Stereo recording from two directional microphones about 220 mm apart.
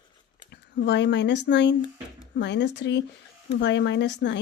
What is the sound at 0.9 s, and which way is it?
Speech, 50° left (ahead or behind).